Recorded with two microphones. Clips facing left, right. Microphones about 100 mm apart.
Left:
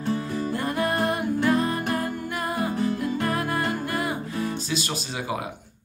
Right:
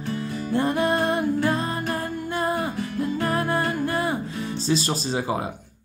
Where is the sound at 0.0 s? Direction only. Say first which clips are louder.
Left 2 dB; 30° left (ahead or behind).